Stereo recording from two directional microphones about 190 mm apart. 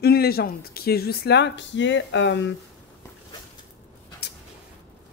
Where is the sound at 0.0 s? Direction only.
55° left (ahead or behind); by 2.5 s 70° left (ahead or behind).